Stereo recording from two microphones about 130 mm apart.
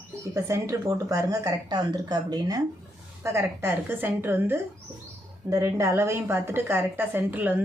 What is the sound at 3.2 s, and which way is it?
A woman's voice, 20° right (ahead or behind).